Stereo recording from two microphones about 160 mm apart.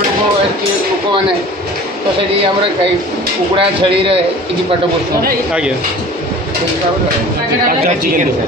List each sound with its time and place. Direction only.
3.5 s speech: 35° right (ahead or behind)